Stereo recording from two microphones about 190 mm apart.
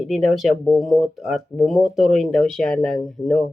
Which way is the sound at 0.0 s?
Centre (ahead or behind).